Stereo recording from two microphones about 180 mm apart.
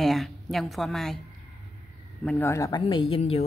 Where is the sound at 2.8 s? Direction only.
30° left (ahead or behind).